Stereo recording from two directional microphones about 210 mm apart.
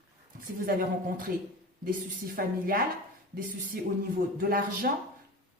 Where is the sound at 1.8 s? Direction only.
45° right (ahead or behind).